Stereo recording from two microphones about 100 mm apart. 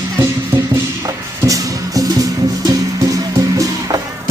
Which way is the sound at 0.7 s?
35° right (ahead or behind).